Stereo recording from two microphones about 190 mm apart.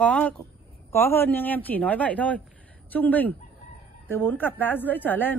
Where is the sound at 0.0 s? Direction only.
5° left (ahead or behind).